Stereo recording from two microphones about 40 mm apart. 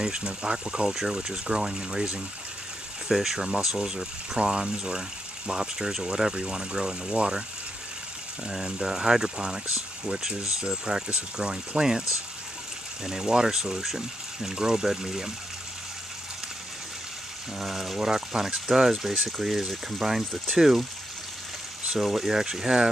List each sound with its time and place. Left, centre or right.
0.0 s speech: centre
3.1 s speech: centre
8.6 s speech: centre
13.0 s speech: centre
17.6 s speech: centre
21.9 s speech: centre